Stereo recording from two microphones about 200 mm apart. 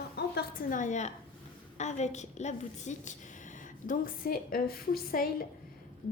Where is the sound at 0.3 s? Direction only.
45° left (ahead or behind).